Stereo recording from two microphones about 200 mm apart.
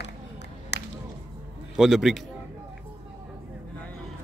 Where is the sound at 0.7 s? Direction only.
60° left (ahead or behind).